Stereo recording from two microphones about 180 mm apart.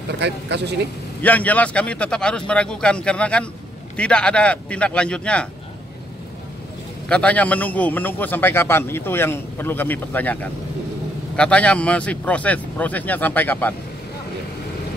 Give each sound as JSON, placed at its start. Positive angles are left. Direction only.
{"t": 0.2, "sound": "speech", "side_deg": -70}
{"t": 1.2, "sound": "a man's voice", "side_deg": 10}
{"t": 7.1, "sound": "a man's voice", "side_deg": 5}